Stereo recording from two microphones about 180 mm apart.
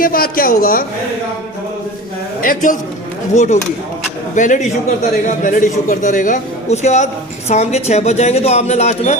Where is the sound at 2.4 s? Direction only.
50° left (ahead or behind).